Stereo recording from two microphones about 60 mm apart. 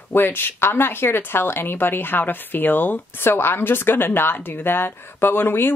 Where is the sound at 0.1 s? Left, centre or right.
Left.